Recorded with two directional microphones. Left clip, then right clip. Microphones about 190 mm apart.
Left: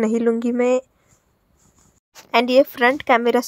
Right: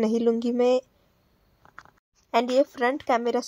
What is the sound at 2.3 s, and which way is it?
Speech, 20° left (ahead or behind).